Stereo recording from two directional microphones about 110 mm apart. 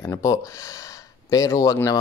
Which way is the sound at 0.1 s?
30° left (ahead or behind).